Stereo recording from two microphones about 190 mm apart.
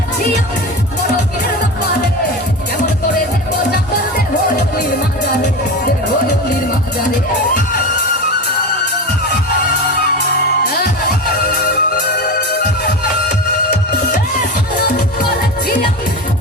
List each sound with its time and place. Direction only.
11.5 s music: 45° left (ahead or behind)